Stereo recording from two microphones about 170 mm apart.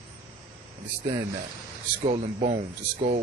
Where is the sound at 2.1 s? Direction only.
45° right (ahead or behind).